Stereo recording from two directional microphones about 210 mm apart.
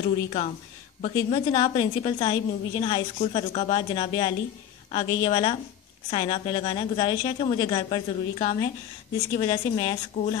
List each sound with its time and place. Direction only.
0.0 s a woman's voice: 30° left (ahead or behind)